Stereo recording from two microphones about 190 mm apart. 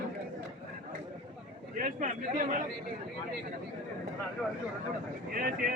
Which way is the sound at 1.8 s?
45° right (ahead or behind).